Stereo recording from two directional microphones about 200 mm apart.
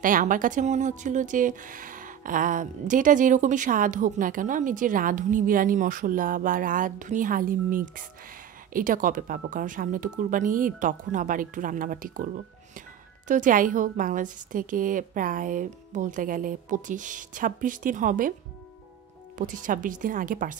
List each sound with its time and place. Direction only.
0.0 s speech: 40° right (ahead or behind)
13.3 s speech: 40° right (ahead or behind)
19.3 s speech: 40° right (ahead or behind)